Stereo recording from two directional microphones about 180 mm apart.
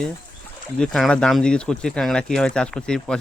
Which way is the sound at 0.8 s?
5° left (ahead or behind).